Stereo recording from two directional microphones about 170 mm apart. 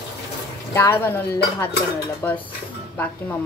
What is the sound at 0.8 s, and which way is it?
A woman's voice, 15° left (ahead or behind).